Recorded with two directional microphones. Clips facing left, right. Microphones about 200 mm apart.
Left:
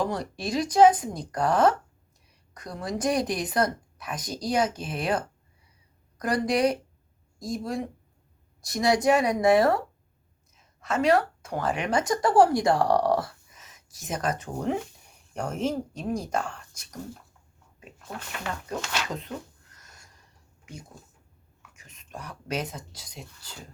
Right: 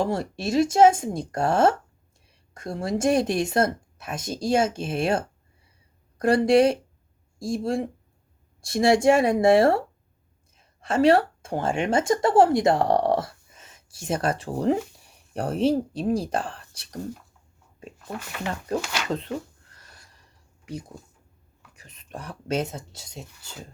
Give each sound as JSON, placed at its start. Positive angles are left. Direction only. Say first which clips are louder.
{"t": 0.0, "sound": "a woman's voice", "louder": "right 3 dB", "side_deg": -25}
{"t": 18.1, "sound": "speech", "louder": "right 4 dB", "side_deg": 0}
{"t": 19.7, "sound": "a sound", "louder": "right 2 dB", "side_deg": -30}
{"t": 21.8, "sound": "speech", "louder": "right 3 dB", "side_deg": -30}